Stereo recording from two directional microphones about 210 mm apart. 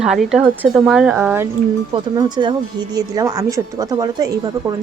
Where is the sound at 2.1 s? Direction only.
20° right (ahead or behind).